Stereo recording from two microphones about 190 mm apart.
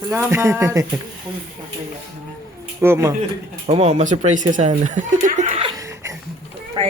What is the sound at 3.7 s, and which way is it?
Speech, 35° right (ahead or behind).